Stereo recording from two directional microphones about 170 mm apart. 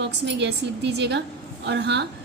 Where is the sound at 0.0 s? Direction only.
90° right.